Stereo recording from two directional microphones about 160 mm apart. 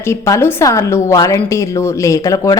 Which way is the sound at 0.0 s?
15° left (ahead or behind).